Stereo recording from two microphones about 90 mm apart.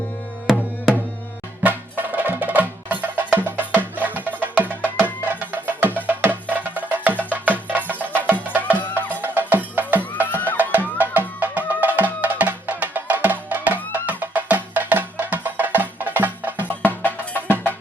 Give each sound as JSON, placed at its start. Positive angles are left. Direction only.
{"t": 0.4, "sound": "music", "side_deg": -5}
{"t": 1.6, "sound": "music", "side_deg": -20}
{"t": 8.8, "sound": "music", "side_deg": 20}
{"t": 9.2, "sound": "music", "side_deg": -20}
{"t": 10.3, "sound": "music", "side_deg": 20}
{"t": 10.6, "sound": "music", "side_deg": -20}
{"t": 16.6, "sound": "music", "side_deg": 20}